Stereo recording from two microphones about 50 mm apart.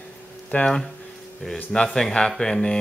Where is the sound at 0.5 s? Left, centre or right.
Left.